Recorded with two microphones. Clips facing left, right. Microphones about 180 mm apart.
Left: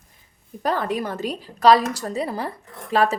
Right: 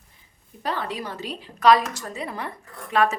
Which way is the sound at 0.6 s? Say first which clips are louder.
Left 5 dB; 45° left (ahead or behind).